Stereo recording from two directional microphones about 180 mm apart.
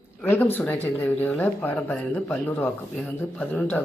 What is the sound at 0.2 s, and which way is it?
Speech, 10° left (ahead or behind).